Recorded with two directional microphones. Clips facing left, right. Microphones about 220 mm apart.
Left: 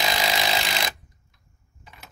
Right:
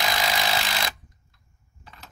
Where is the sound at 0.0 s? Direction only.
15° left (ahead or behind).